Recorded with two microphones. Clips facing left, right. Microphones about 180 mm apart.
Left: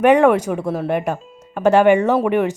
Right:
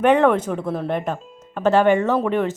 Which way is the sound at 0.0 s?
10° left (ahead or behind).